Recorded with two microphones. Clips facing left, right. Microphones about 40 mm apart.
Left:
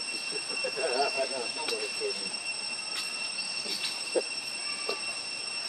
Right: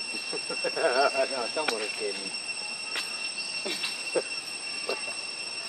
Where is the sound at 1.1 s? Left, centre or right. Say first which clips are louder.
Right 4 dB; right.